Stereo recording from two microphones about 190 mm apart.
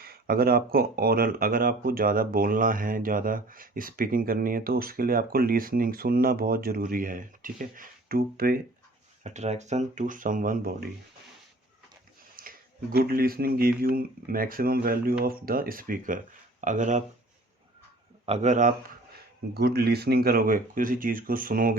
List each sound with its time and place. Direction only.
0.0 s speech: 55° right (ahead or behind)
9.2 s speech: 35° right (ahead or behind)
12.4 s speech: 50° right (ahead or behind)
18.3 s speech: 40° right (ahead or behind)
19.5 s speech: 60° right (ahead or behind)